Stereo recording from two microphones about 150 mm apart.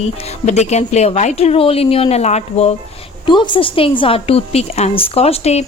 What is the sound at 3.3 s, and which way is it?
A woman's voice, 30° left (ahead or behind).